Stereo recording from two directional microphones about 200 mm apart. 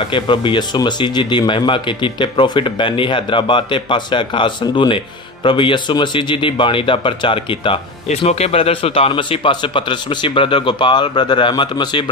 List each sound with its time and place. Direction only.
0.1 s speech: 25° left (ahead or behind)